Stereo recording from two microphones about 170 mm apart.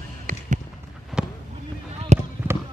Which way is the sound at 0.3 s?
55° right (ahead or behind).